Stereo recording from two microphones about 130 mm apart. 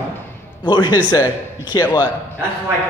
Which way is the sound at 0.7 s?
35° left (ahead or behind).